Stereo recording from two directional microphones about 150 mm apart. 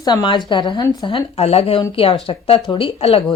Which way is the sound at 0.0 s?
30° left (ahead or behind).